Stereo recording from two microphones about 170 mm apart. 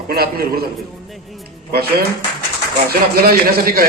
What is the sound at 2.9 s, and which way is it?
A man's voice, 60° right (ahead or behind).